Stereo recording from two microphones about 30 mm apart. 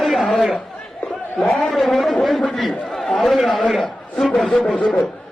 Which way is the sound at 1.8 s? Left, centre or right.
Centre.